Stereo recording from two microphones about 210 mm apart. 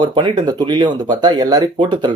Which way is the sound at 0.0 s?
20° right (ahead or behind).